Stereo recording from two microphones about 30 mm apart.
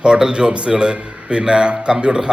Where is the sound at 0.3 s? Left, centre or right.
Right.